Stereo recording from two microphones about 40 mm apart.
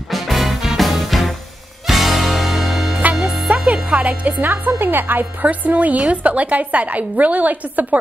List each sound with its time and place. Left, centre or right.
0.1 s music: centre
3.4 s music: right
4.5 s a woman's voice: right
5.4 s a woman's voice: right